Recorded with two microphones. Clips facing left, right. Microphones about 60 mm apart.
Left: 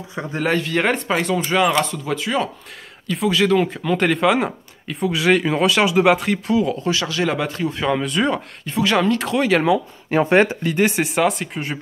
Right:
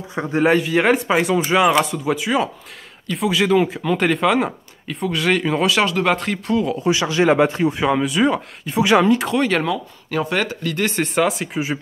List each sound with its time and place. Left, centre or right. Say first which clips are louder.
0.1 s a man's voice: right 5 dB; right; by 6.8 s centre
6.8 s speech: right 4 dB; centre
7.9 s a man's voice: right 2 dB; centre
9.3 s speech: left 1 dB; centre
10.0 s speech: left 6 dB; left
11.1 s speech: even; centre